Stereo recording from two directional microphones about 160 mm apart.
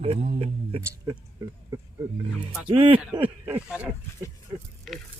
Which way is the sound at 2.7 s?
35° right (ahead or behind).